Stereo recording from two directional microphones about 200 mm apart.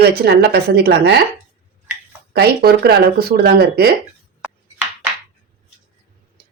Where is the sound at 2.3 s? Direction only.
50° right (ahead or behind).